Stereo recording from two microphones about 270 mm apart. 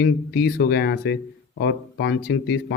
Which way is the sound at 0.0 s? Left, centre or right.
Left.